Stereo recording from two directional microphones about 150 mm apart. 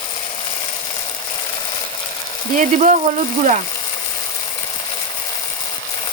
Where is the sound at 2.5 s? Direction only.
55° right (ahead or behind).